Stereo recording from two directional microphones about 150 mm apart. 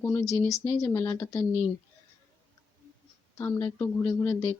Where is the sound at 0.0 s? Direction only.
15° left (ahead or behind).